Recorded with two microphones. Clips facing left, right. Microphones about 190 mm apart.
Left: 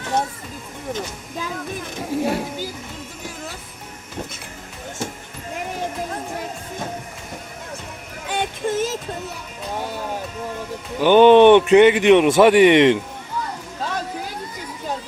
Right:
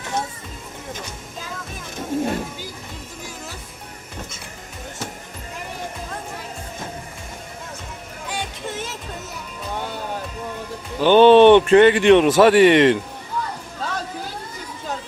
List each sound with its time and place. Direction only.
2.1 s a sound: 10° left (ahead or behind)
8.3 s music: 50° left (ahead or behind)
11.0 s a man's voice: 15° left (ahead or behind)